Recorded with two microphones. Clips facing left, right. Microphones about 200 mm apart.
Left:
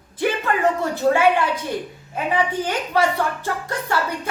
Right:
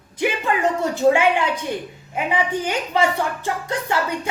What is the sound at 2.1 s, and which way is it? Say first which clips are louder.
A woman's voice: even; 15° right (ahead or behind).